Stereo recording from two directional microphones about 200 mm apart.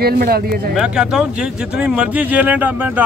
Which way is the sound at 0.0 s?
50° right (ahead or behind).